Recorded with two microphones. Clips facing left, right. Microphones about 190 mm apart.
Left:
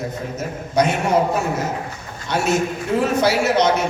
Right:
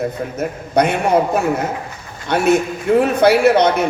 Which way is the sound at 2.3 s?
60° right (ahead or behind).